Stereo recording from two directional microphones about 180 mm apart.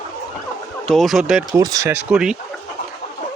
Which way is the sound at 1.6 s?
20° right (ahead or behind).